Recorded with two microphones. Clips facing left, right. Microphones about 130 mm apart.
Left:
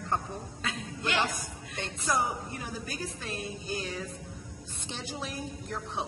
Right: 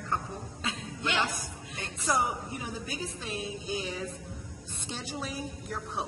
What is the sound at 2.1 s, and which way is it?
A woman's voice, 20° right (ahead or behind).